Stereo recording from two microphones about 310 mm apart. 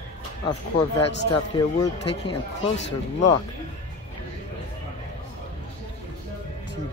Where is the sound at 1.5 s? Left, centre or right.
Centre.